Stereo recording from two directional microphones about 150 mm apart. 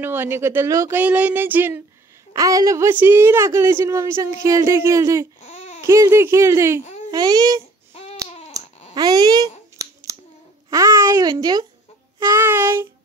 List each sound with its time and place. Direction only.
0.0 s speech: 15° right (ahead or behind)
5.4 s babbling: 45° left (ahead or behind)
5.8 s speech: 20° right (ahead or behind)
8.5 s a sound: 25° right (ahead or behind)
10.7 s speech: 20° right (ahead or behind)
12.3 s child singing: 15° right (ahead or behind)